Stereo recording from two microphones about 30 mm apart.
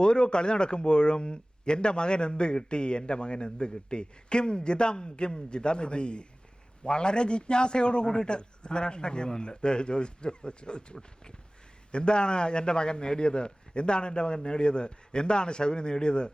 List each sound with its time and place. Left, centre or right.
0.0 s speech: left